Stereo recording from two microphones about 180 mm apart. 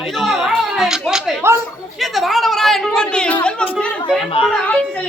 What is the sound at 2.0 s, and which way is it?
Chatter, centre (ahead or behind).